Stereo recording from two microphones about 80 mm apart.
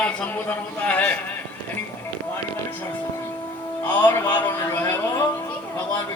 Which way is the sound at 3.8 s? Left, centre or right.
Left.